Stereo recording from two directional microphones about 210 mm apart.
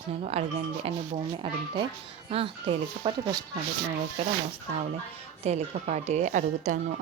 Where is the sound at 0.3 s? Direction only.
30° right (ahead or behind).